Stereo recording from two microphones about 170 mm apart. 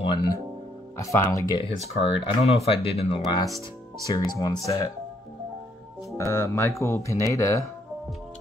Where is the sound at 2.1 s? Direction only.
35° left (ahead or behind).